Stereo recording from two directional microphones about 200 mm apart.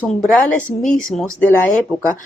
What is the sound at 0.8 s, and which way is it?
Speech, 40° left (ahead or behind).